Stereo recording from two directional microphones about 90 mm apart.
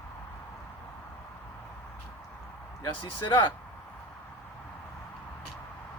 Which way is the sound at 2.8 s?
65° left (ahead or behind).